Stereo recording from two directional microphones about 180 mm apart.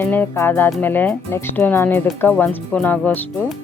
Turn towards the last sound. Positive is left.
turn(degrees=10)  # may be behind; listen again after turning